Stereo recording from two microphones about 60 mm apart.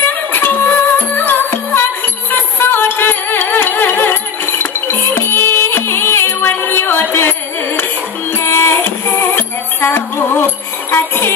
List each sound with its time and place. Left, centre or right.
0.0 s music: left